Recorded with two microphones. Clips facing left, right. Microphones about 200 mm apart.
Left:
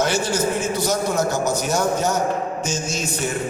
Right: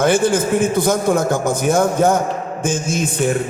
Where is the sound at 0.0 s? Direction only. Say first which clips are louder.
Right 6 dB; 55° right (ahead or behind).